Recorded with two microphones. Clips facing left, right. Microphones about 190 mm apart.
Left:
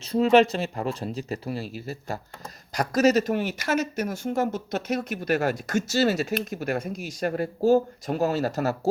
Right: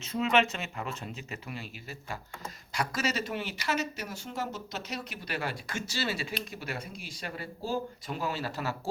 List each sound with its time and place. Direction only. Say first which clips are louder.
0.0 s speech: left 9 dB; 35° left (ahead or behind)